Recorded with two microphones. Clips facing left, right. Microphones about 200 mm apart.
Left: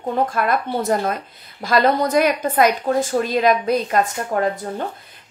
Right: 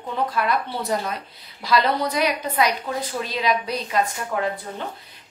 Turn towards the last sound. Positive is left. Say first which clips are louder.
# left 5 dB
turn(degrees=45)  # may be behind; listen again after turning